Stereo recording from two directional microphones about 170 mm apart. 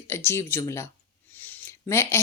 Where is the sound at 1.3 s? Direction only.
10° left (ahead or behind).